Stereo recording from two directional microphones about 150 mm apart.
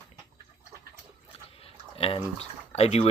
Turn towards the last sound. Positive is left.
turn(degrees=45)  # may be behind; listen again after turning